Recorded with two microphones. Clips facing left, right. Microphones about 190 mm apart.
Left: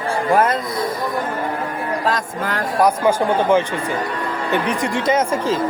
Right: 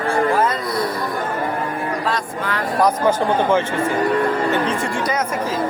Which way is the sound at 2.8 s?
15° left (ahead or behind).